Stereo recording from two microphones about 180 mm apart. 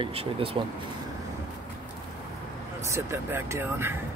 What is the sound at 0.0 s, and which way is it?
Speech, 30° right (ahead or behind).